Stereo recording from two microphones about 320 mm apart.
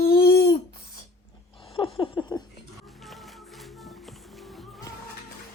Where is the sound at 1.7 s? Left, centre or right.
Centre.